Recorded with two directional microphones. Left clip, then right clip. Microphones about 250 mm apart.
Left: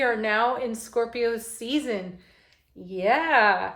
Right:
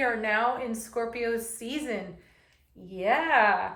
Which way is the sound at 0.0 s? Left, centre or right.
Centre.